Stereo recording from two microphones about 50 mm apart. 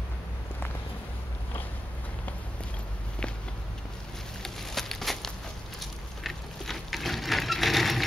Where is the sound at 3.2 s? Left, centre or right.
Centre.